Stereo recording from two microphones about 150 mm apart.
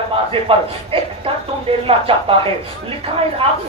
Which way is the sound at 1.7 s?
40° right (ahead or behind).